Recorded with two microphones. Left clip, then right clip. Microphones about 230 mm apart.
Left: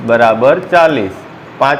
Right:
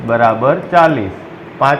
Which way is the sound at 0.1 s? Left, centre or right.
Left.